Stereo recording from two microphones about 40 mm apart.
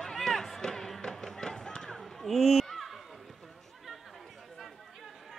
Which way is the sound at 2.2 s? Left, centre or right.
Centre.